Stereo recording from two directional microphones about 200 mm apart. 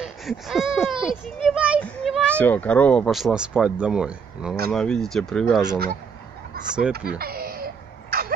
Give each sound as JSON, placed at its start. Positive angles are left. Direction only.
{"t": 0.0, "sound": "a sound", "side_deg": 0}
{"t": 1.0, "sound": "speech", "side_deg": -5}
{"t": 7.1, "sound": "cough", "side_deg": -50}